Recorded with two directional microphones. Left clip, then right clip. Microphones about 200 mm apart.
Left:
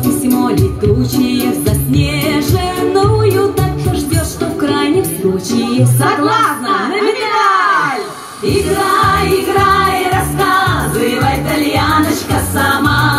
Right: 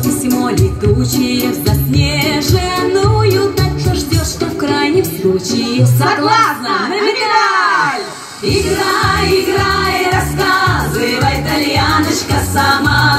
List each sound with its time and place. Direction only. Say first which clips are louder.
0.0 s music: left 1 dB; 20° right (ahead or behind)
6.0 s a sound: right 1 dB; 25° right (ahead or behind)
8.5 s music: left 1 dB; 20° right (ahead or behind)